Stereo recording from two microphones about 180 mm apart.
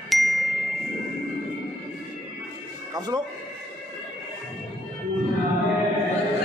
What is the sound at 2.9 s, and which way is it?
Speech, 20° right (ahead or behind).